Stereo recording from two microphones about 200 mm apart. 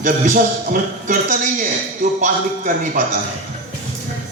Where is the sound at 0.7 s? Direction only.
40° right (ahead or behind).